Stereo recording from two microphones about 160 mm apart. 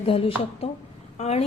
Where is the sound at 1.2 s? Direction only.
40° left (ahead or behind).